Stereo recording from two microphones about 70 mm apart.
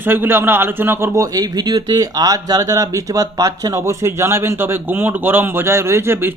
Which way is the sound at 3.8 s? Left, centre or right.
Right.